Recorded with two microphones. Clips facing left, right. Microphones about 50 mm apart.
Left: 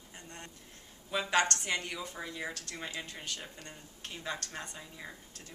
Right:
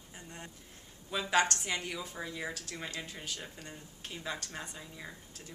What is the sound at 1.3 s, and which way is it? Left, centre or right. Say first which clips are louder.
A woman's voice: right 1 dB; centre.